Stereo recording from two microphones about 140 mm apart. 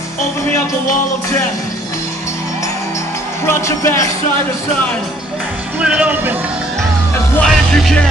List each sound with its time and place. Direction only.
3.4 s speech: 20° left (ahead or behind)
5.8 s speech: 10° right (ahead or behind)
7.4 s music: 5° left (ahead or behind)